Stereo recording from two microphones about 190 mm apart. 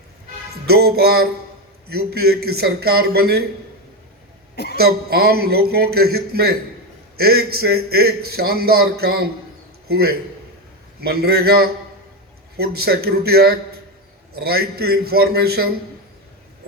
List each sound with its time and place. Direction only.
0.7 s a man's voice: 55° right (ahead or behind)
4.5 s a sound: 60° left (ahead or behind)
4.8 s a man's voice: 55° right (ahead or behind)